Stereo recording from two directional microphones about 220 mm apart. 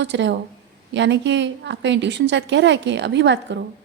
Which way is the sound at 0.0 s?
55° right (ahead or behind).